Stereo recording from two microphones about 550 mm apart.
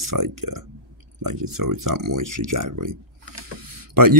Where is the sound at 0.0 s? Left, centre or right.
Right.